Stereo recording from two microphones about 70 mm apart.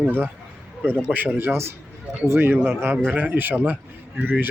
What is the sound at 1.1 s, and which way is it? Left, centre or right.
Speech, right.